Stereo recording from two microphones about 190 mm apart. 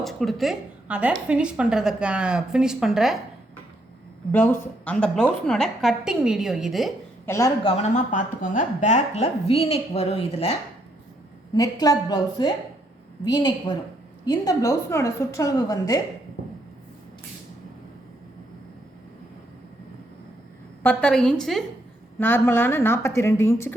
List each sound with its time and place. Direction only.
0.0 s a woman's voice: centre (ahead or behind)
4.3 s a woman's voice: 10° left (ahead or behind)
7.3 s a woman's voice: 15° left (ahead or behind)
7.6 s a woman's voice: 30° left (ahead or behind)
11.5 s a woman's voice: 20° left (ahead or behind)
20.8 s a woman's voice: 5° left (ahead or behind)